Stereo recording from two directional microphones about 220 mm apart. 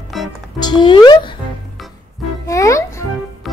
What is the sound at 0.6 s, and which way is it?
Speech, 20° left (ahead or behind).